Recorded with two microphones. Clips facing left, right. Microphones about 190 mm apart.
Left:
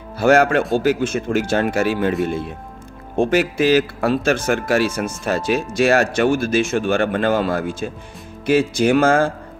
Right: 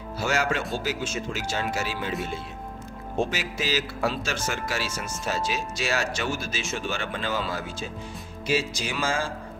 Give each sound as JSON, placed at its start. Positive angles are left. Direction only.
{"t": 0.2, "sound": "speech", "side_deg": 55}